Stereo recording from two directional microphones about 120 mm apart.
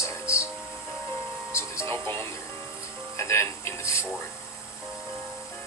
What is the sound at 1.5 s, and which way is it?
Music, 25° left (ahead or behind).